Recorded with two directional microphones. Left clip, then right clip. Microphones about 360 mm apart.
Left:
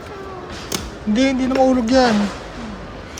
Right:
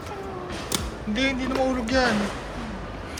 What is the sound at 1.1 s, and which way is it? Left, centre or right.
Speech, centre.